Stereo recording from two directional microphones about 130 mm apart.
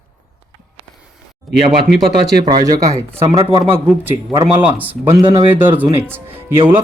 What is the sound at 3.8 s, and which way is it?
Speech, 10° right (ahead or behind).